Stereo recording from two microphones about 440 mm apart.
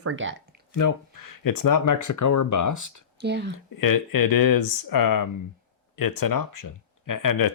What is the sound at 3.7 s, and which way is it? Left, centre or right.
Speech, left.